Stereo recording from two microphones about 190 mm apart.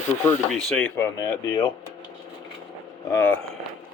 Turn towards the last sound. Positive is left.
turn(degrees=15)  # may be behind; listen again after turning